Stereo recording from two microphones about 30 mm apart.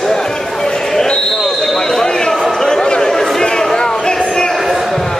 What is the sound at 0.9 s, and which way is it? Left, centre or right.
Basketball bounce, left.